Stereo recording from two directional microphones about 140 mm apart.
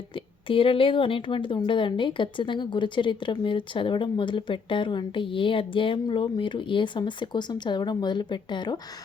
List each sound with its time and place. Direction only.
0.4 s speech: 40° left (ahead or behind)